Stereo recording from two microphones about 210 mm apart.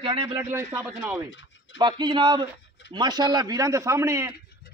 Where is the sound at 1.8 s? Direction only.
20° right (ahead or behind).